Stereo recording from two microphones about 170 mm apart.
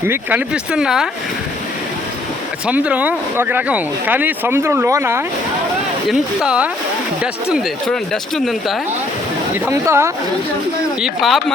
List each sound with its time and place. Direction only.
0.0 s speech: 10° right (ahead or behind)
2.6 s speech: 5° right (ahead or behind)
6.1 s speech: 5° right (ahead or behind)
9.6 s speech: 15° right (ahead or behind)
11.0 s speech: centre (ahead or behind)